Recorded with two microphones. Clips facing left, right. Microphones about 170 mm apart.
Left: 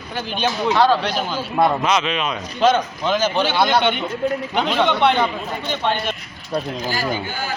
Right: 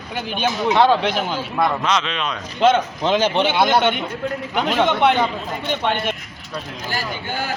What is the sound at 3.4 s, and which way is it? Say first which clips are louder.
A man's voice: right 1 dB; 10° right (ahead or behind).